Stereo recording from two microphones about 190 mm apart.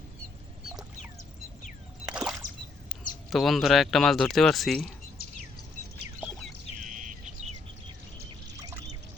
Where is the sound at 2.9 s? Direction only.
Centre (ahead or behind).